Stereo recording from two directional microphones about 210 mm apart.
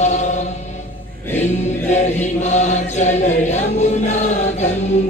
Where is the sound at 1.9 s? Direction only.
35° left (ahead or behind).